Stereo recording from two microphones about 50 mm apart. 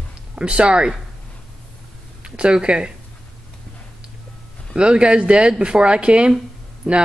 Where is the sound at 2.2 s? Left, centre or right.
Centre.